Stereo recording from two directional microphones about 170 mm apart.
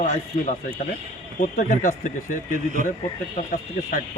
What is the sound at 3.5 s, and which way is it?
Speech, 55° left (ahead or behind).